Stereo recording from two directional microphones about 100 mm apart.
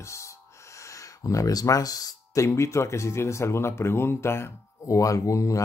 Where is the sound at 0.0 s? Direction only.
30° left (ahead or behind).